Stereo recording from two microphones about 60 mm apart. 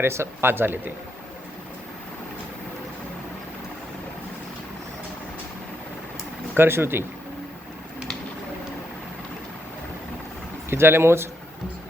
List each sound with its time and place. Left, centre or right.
0.0 s speech: right
6.5 s speech: right
10.7 s speech: right